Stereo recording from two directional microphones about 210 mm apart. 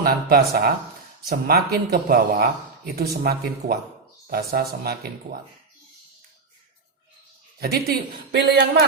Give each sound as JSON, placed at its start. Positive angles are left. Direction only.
{"t": 0.0, "sound": "speech", "side_deg": -45}
{"t": 7.6, "sound": "speech", "side_deg": -50}